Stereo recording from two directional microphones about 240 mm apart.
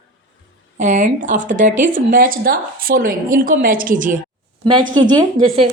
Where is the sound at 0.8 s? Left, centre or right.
Right.